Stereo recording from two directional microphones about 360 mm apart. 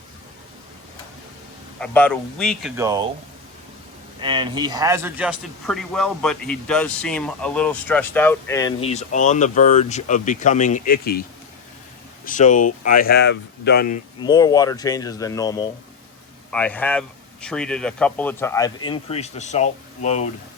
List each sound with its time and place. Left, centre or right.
1.8 s a man's voice: centre
4.2 s a man's voice: centre; by 11.2 s left
12.2 s speech: left
14.2 s a man's voice: centre